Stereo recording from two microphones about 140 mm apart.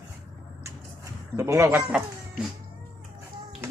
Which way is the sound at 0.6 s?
20° right (ahead or behind).